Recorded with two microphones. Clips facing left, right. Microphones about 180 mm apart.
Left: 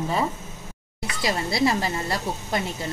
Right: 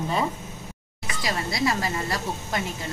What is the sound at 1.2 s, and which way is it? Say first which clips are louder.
Speech: left 3 dB; 25° left (ahead or behind).